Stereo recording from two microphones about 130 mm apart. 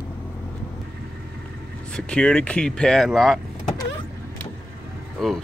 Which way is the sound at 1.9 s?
5° left (ahead or behind).